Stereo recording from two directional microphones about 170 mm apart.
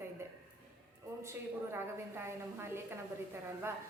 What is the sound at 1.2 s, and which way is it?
A woman's voice, 15° right (ahead or behind).